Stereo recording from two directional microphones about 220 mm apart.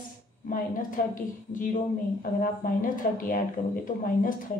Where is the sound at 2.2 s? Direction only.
40° left (ahead or behind).